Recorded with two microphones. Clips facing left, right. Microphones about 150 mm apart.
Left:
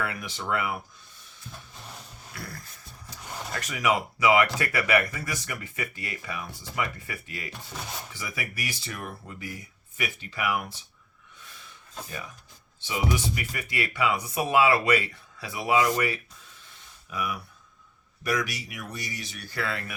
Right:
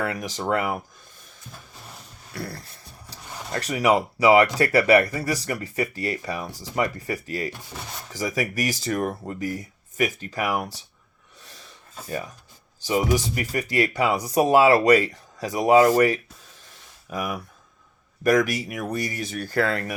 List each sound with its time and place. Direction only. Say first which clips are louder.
0.0 s speech: right 5 dB; 40° right (ahead or behind)
2.3 s dog: right 8 dB; 35° right (ahead or behind)
3.5 s speech: right 6 dB; 35° right (ahead or behind)
7.5 s speech: even; centre (ahead or behind)
8.1 s speech: right 16 dB; 40° right (ahead or behind)
11.3 s snort: right 2 dB; 35° right (ahead or behind)
12.0 s speech: right 13 dB; 35° right (ahead or behind)